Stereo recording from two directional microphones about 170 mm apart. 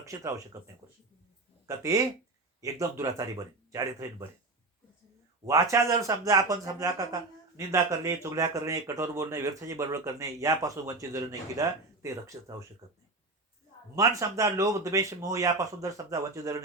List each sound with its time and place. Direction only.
0.0 s speech: 20° right (ahead or behind)
1.6 s speech: 20° right (ahead or behind)
5.5 s speech: 20° right (ahead or behind)
13.9 s speech: 20° right (ahead or behind)